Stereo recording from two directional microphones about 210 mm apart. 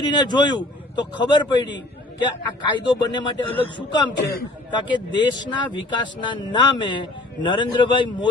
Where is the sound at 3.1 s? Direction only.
20° left (ahead or behind).